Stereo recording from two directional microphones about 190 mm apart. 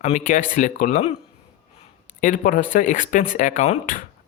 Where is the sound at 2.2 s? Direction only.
45° left (ahead or behind).